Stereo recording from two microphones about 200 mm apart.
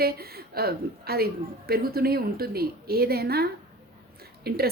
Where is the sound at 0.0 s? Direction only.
50° right (ahead or behind).